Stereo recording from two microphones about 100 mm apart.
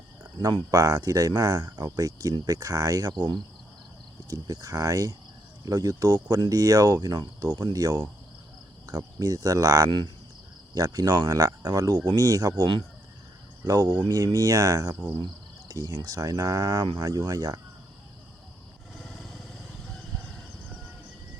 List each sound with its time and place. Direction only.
0.7 s speech: 40° right (ahead or behind)
13.7 s speech: 35° right (ahead or behind)
18.9 s vehicle: centre (ahead or behind)